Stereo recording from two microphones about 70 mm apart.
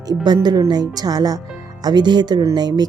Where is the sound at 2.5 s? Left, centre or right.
Right.